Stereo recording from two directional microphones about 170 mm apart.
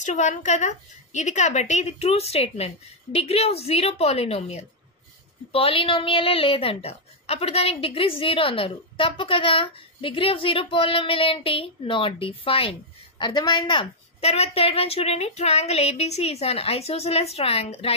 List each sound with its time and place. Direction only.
0.0 s a woman's voice: 45° left (ahead or behind)